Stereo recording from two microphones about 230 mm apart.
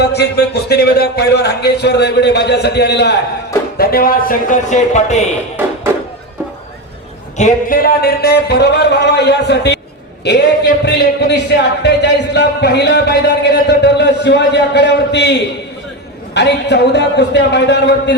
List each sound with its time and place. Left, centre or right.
0.0 s speech: left
7.3 s speech: left